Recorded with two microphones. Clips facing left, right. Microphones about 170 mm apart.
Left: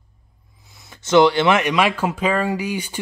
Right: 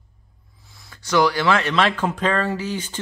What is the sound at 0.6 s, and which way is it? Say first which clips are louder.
Speech: left 2 dB; 20° left (ahead or behind).